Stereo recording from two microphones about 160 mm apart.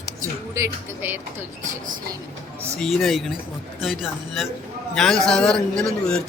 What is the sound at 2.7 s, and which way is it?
Speech, centre (ahead or behind).